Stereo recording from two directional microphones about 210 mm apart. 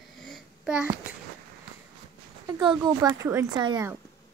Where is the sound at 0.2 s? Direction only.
Centre (ahead or behind).